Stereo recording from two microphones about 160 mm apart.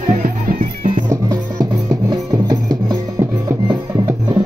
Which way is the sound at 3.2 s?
20° right (ahead or behind).